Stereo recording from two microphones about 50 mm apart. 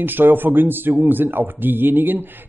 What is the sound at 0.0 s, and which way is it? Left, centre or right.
Speech, right.